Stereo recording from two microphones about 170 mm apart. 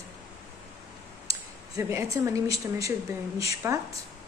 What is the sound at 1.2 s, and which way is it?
Speech, 20° right (ahead or behind).